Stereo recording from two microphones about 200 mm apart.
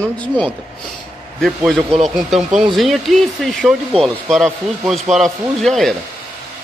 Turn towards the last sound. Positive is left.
turn(degrees=0)  # may be behind; listen again after turning